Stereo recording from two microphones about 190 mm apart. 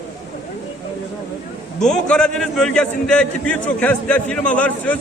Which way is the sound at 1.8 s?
5° left (ahead or behind).